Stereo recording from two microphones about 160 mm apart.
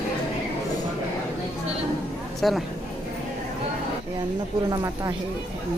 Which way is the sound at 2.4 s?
Centre (ahead or behind).